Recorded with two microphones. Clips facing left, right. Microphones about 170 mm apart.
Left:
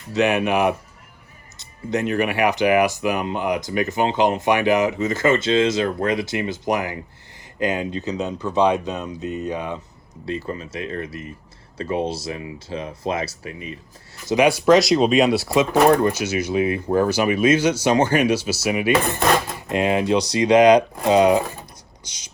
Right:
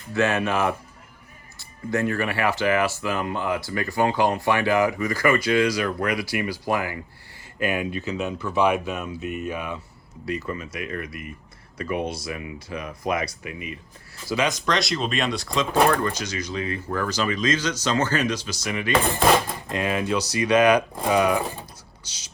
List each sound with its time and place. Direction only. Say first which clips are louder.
0.1 s speech: left 3 dB; 15° left (ahead or behind); by 13.7 s 35° left (ahead or behind)
14.3 s speech: left 7 dB; 15° left (ahead or behind)
14.7 s speech: left 10 dB; centre (ahead or behind)
19.2 s dishes: even; 10° right (ahead or behind)
19.6 s speech: left 5 dB; 20° left (ahead or behind)